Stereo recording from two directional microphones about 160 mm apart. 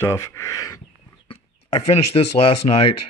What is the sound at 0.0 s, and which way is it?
Speech, 15° left (ahead or behind).